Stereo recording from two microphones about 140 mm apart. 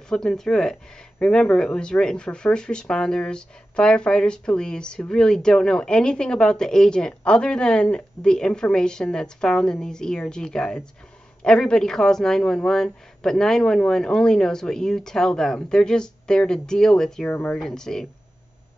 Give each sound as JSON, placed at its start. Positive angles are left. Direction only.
{"t": 0.1, "sound": "speech", "side_deg": 5}
{"t": 17.6, "sound": "speech", "side_deg": 5}